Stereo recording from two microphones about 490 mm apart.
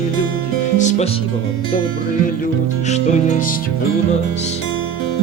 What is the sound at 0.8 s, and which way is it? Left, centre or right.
Speech, centre.